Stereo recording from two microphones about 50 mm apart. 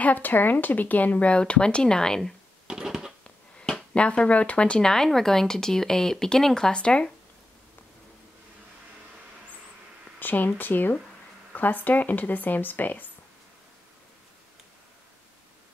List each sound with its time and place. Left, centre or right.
0.0 s speech: left
1.3 s speech: centre
2.7 s a sound: centre
3.3 s a sound: left
3.9 s speech: left
10.1 s speech: left